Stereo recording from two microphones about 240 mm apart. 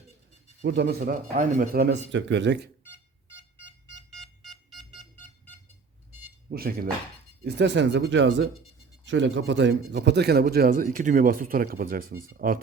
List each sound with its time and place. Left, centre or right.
0.6 s speech: right
4.1 s a sound: centre
6.5 s a man's voice: right